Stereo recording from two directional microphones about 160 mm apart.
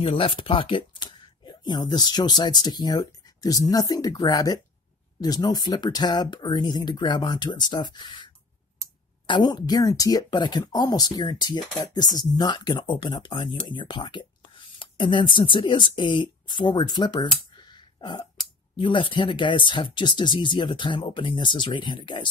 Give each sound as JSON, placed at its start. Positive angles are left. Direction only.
{"t": 0.0, "sound": "speech", "side_deg": 35}
{"t": 14.8, "sound": "a sound", "side_deg": 30}
{"t": 15.3, "sound": "speech", "side_deg": 30}